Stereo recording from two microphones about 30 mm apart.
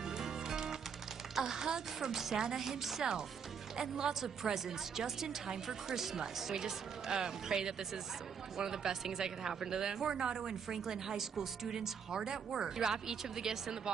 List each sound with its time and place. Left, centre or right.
0.0 s music: centre
1.3 s speech: centre